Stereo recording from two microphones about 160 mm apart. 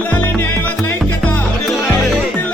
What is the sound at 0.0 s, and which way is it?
Music, 10° left (ahead or behind).